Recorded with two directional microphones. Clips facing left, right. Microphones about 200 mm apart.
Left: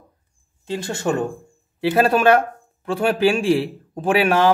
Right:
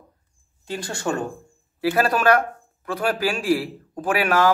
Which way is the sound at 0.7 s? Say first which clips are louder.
Left 4 dB; 25° left (ahead or behind).